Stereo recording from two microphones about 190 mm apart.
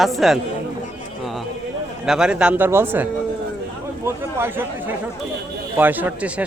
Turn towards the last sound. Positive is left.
turn(degrees=-10)  # may be behind; listen again after turning